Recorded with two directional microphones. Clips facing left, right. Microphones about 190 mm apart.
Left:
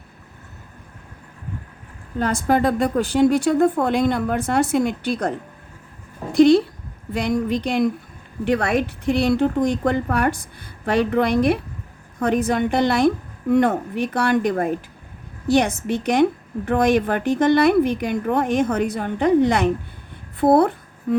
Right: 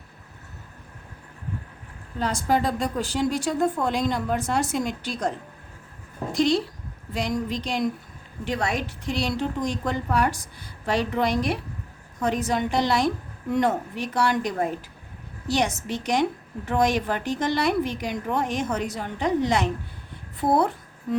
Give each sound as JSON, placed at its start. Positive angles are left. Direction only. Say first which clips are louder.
{"t": 2.1, "sound": "a woman's voice", "louder": "left 4 dB", "side_deg": 55}
{"t": 6.3, "sound": "a woman's voice", "louder": "left 9 dB", "side_deg": 60}